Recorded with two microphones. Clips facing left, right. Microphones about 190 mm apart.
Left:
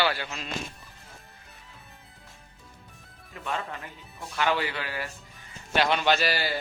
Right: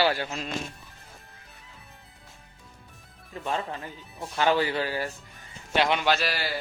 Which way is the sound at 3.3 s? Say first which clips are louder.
Right 3 dB; 35° right (ahead or behind).